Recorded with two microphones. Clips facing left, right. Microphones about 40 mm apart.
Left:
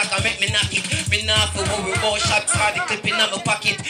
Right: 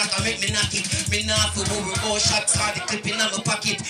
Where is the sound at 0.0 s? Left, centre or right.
Left.